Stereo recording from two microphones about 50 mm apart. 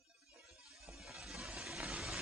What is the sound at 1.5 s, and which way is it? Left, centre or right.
Vehicle, centre.